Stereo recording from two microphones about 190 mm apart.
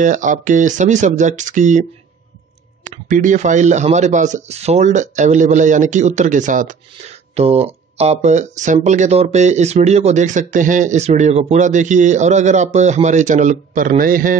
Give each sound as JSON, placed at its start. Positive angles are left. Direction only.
{"t": 0.0, "sound": "speech", "side_deg": -40}
{"t": 2.9, "sound": "speech", "side_deg": -40}